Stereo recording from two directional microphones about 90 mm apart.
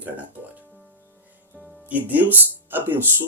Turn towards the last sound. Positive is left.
turn(degrees=-25)  # may be behind; listen again after turning